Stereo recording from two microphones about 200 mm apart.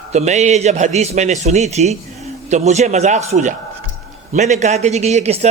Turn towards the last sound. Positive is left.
turn(degrees=-30)  # may be behind; listen again after turning